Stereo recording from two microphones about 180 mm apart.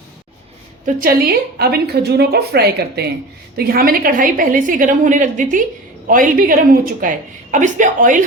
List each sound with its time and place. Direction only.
0.9 s a woman's voice: 50° right (ahead or behind)